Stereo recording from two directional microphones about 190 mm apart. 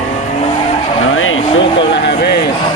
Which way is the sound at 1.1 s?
90° left.